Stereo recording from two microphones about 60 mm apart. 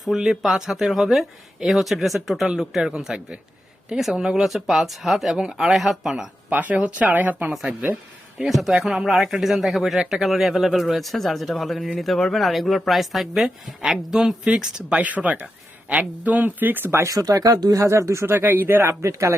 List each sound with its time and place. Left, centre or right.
0.2 s speech: centre
6.5 s speech: right
8.4 s speech: centre; by 17.0 s right
17.0 s speech: right
17.8 s speech: right